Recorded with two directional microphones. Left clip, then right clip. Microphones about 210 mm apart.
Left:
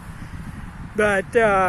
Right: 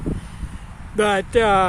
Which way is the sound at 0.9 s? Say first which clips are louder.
Right 1 dB; 15° right (ahead or behind).